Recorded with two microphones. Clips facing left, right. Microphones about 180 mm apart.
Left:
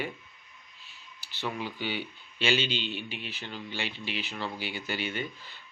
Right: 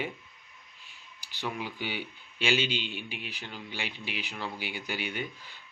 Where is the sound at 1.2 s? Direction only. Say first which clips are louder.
Left 1 dB; 15° right (ahead or behind).